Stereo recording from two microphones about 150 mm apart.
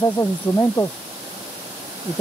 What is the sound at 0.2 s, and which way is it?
Speech, 20° left (ahead or behind).